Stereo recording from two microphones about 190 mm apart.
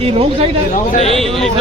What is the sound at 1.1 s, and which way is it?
Speech, centre (ahead or behind).